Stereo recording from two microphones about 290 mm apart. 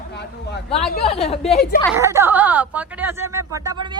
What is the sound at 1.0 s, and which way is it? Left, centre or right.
Speech, centre.